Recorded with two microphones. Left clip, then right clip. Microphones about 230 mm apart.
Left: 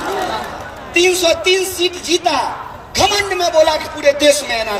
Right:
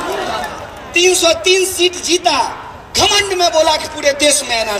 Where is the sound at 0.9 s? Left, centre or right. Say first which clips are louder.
Right 1 dB; right.